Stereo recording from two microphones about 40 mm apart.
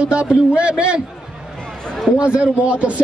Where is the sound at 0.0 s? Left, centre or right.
Right.